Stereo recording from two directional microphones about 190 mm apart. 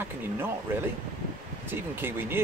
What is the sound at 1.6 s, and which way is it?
Speech, 10° right (ahead or behind).